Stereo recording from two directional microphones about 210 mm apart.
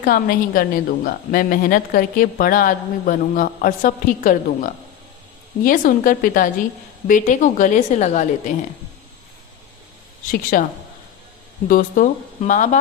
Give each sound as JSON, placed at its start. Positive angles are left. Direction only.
{"t": 0.0, "sound": "a woman's voice", "side_deg": 40}
{"t": 10.5, "sound": "speech", "side_deg": 45}
{"t": 11.7, "sound": "a woman's voice", "side_deg": 40}